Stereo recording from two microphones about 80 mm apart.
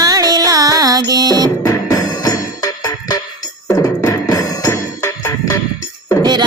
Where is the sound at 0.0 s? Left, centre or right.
Right.